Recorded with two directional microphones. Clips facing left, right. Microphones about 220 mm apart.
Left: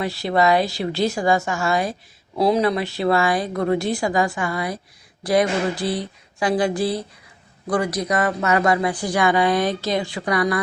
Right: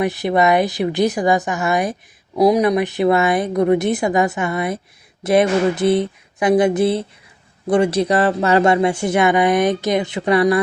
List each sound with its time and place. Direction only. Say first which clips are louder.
0.0 s speech: right 3 dB; 20° right (ahead or behind)